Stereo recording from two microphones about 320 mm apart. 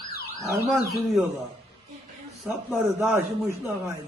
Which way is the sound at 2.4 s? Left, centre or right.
Centre.